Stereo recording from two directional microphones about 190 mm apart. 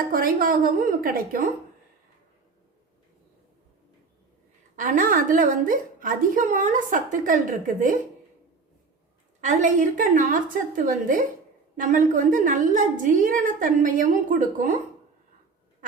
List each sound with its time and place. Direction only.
0.1 s a woman's voice: 50° right (ahead or behind)
4.8 s a woman's voice: 45° right (ahead or behind)
9.4 s a woman's voice: 40° right (ahead or behind)